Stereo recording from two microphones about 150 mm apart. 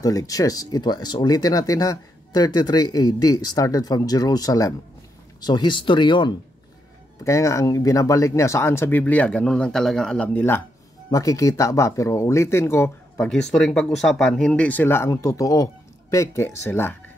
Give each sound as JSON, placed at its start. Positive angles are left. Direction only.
{"t": 0.0, "sound": "speech", "side_deg": 25}
{"t": 7.2, "sound": "speech", "side_deg": 20}
{"t": 13.2, "sound": "speech", "side_deg": 5}